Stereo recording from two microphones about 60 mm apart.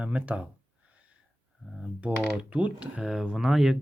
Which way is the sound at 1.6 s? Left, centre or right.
Centre.